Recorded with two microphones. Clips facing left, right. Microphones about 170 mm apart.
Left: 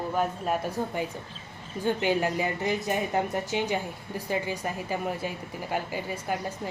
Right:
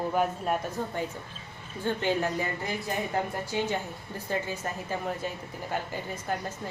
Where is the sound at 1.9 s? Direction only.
15° left (ahead or behind).